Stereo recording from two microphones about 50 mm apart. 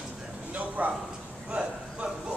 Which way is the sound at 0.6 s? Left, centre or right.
Right.